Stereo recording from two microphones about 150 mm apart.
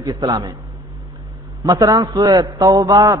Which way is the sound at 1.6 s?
25° right (ahead or behind).